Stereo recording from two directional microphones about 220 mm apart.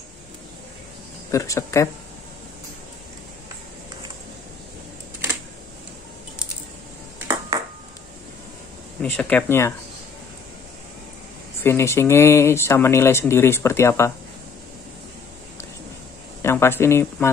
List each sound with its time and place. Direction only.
1.3 s speech: 15° left (ahead or behind)
7.2 s a sound: 15° right (ahead or behind)
9.0 s speech: 5° left (ahead or behind)
11.6 s speech: 10° left (ahead or behind)
16.4 s speech: 10° left (ahead or behind)